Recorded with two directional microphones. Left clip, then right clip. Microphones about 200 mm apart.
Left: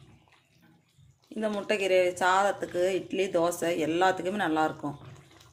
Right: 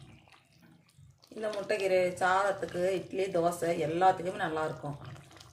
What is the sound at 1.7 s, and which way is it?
Speech, 45° left (ahead or behind).